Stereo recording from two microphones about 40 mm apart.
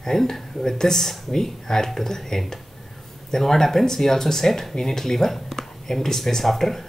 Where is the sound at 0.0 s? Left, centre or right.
Centre.